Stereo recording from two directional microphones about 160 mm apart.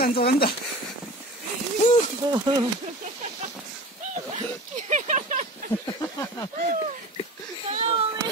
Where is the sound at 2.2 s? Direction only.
25° right (ahead or behind).